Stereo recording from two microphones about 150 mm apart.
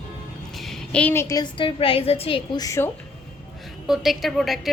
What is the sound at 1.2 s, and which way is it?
A woman's voice, 25° left (ahead or behind).